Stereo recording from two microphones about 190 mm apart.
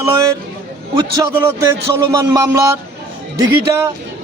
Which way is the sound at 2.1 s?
20° right (ahead or behind).